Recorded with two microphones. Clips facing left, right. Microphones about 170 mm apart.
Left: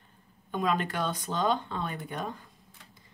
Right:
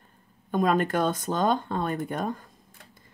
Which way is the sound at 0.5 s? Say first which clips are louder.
Right 6 dB; 45° right (ahead or behind).